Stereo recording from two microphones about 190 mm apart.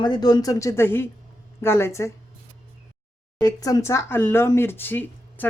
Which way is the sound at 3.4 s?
20° left (ahead or behind).